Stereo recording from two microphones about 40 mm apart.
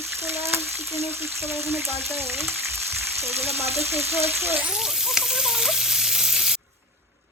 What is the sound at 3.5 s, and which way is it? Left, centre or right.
Speech, right.